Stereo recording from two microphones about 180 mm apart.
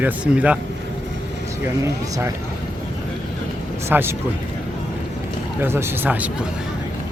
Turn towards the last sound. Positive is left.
turn(degrees=-10)  # may be behind; listen again after turning